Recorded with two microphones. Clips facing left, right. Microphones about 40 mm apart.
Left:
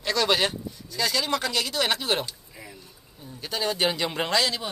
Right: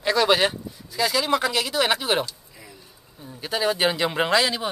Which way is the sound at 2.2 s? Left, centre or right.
Centre.